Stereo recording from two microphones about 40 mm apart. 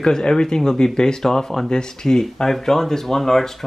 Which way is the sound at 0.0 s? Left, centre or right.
Centre.